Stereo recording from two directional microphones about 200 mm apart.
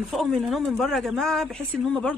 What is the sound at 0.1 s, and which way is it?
A woman's voice, centre (ahead or behind).